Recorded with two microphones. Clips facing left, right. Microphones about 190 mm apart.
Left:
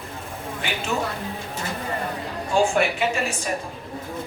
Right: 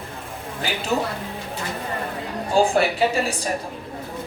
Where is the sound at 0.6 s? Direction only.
35° right (ahead or behind).